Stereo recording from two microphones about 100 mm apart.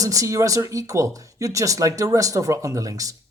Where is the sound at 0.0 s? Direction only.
35° right (ahead or behind).